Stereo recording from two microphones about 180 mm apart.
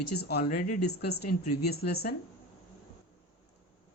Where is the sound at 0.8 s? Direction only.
65° left (ahead or behind).